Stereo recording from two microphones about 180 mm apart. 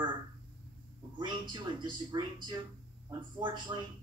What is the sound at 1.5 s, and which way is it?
Speech, 25° right (ahead or behind).